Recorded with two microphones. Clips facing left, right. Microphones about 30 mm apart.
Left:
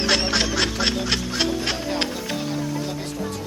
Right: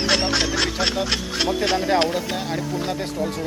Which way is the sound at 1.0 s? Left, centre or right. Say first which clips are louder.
Even; centre.